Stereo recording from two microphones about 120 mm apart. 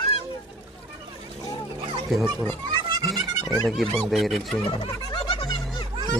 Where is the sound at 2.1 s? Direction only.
Centre (ahead or behind).